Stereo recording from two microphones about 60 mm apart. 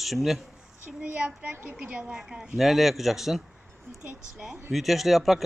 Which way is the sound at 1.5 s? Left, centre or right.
Right.